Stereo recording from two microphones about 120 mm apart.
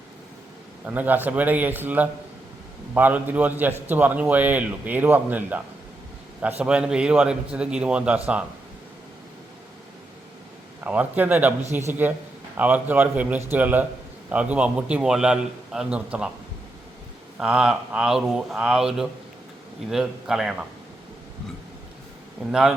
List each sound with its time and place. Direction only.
0.9 s a man's voice: 15° right (ahead or behind)
6.6 s a man's voice: 10° right (ahead or behind)
10.8 s a man's voice: 15° right (ahead or behind)
17.4 s speech: 5° right (ahead or behind)